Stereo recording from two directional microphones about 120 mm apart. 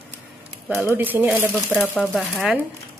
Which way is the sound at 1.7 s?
15° left (ahead or behind).